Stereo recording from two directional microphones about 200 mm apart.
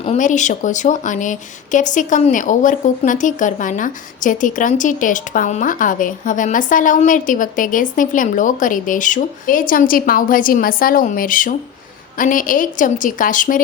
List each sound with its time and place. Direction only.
0.0 s a woman's voice: 35° left (ahead or behind)